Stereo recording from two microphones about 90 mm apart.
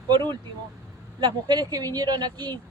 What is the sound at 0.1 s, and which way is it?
A woman's voice, 60° right (ahead or behind).